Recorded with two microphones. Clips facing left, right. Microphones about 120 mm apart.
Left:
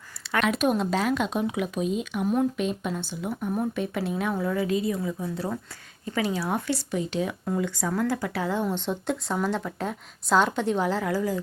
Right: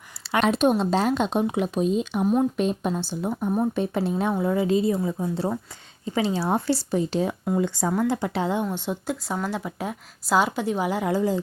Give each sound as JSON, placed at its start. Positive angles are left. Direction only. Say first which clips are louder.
{"t": 0.2, "sound": "a woman's voice", "louder": "right 4 dB", "side_deg": -30}
{"t": 2.2, "sound": "a woman's voice", "louder": "right 2 dB", "side_deg": -20}
{"t": 2.6, "sound": "a woman's voice", "louder": "right 4 dB", "side_deg": -35}
{"t": 8.7, "sound": "speech", "louder": "even", "side_deg": -10}
{"t": 11.1, "sound": "a woman's voice", "louder": "right 3 dB", "side_deg": -25}